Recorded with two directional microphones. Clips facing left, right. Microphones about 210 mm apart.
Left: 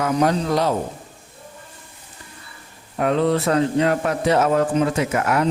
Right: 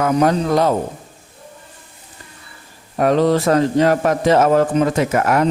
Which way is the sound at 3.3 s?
45° right (ahead or behind).